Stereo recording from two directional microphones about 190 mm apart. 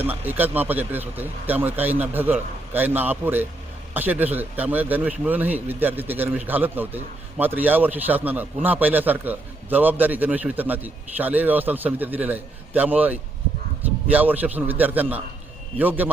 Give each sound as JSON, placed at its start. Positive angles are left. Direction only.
{"t": 0.0, "sound": "speech", "side_deg": -10}